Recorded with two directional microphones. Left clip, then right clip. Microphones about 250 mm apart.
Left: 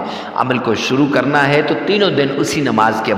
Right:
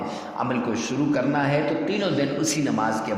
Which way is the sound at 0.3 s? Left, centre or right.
Left.